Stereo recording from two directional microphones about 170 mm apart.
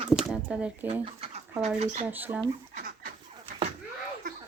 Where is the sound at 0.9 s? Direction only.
35° right (ahead or behind).